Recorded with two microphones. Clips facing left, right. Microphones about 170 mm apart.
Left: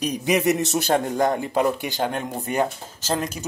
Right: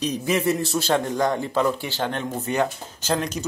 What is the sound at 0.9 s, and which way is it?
Speech, 45° left (ahead or behind).